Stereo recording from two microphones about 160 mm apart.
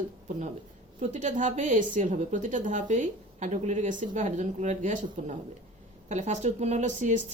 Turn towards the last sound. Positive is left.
turn(degrees=-50)  # may be behind; listen again after turning